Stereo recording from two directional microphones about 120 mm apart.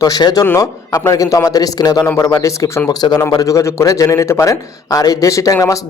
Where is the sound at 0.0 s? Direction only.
35° left (ahead or behind).